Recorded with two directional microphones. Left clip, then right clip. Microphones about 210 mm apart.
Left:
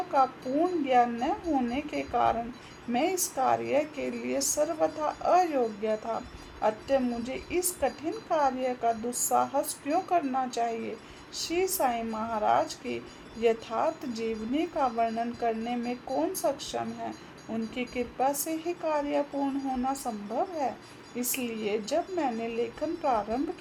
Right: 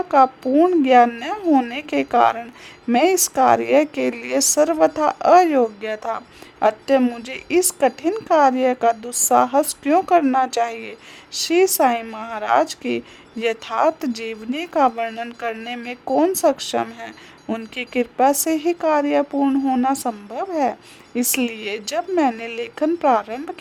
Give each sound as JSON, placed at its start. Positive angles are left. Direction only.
{"t": 0.1, "sound": "a woman's voice", "side_deg": -55}